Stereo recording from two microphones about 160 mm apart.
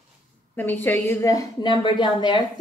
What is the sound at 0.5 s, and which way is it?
A woman's voice, 10° left (ahead or behind).